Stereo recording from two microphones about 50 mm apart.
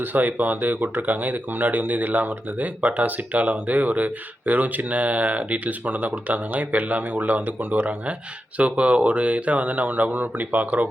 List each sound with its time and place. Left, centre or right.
0.0 s speech: right